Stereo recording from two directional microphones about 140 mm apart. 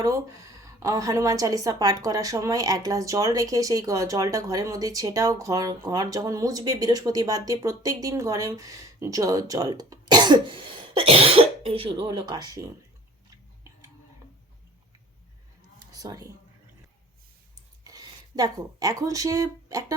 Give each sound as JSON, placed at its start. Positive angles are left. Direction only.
{"t": 0.8, "sound": "a woman's voice", "side_deg": -25}
{"t": 15.8, "sound": "a sound", "side_deg": -25}
{"t": 17.8, "sound": "speech", "side_deg": -30}